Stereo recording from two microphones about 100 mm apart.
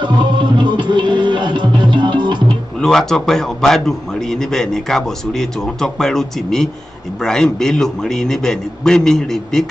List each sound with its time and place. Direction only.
0.0 s music: 50° right (ahead or behind)
2.8 s a man's voice: 5° left (ahead or behind)